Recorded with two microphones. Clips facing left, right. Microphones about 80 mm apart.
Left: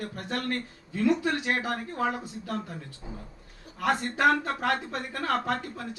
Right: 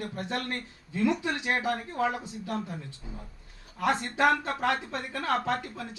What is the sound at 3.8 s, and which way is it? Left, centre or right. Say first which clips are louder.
Speech: left 1 dB; right.